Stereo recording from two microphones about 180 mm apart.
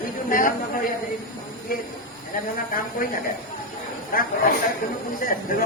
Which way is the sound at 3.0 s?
50° left (ahead or behind).